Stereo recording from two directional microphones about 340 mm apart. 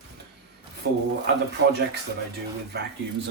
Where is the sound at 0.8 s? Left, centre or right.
Right.